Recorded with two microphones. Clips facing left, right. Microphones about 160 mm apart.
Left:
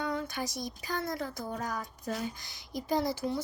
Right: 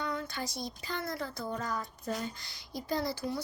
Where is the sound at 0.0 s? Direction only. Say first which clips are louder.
Left 2 dB; 20° left (ahead or behind).